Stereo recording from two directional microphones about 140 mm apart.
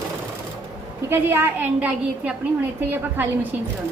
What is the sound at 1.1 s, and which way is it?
A woman's voice, 15° right (ahead or behind).